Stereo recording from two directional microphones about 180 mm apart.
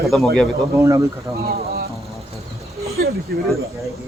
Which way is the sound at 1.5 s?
60° right (ahead or behind).